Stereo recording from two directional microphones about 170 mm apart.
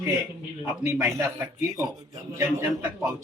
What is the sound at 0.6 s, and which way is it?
Speech, 15° right (ahead or behind).